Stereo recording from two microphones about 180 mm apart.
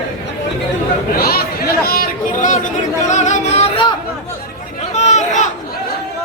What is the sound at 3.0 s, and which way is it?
Music, 40° left (ahead or behind).